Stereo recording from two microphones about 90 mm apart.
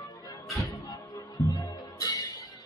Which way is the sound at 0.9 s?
45° left (ahead or behind).